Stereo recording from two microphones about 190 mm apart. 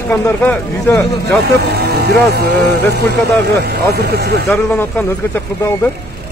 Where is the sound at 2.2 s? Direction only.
60° right (ahead or behind).